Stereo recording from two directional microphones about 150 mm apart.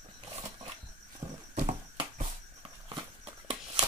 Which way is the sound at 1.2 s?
45° right (ahead or behind).